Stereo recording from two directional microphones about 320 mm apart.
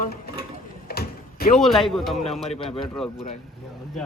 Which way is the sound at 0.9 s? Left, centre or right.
Left.